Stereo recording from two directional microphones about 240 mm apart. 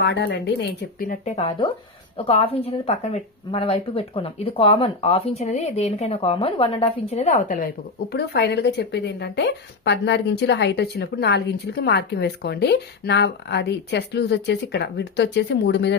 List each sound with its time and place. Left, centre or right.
0.0 s a woman's voice: left
8.1 s a woman's voice: left